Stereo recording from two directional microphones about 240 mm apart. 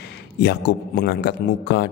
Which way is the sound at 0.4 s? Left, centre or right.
Left.